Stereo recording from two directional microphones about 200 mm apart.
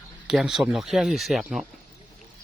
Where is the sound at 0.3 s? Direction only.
Centre (ahead or behind).